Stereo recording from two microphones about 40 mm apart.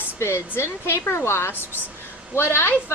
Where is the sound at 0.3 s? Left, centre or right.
Left.